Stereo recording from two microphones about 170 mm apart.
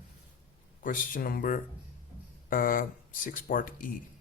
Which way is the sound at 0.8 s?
50° left (ahead or behind).